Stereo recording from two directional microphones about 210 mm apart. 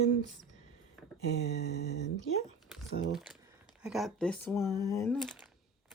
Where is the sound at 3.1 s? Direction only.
Centre (ahead or behind); by 5.1 s 15° left (ahead or behind).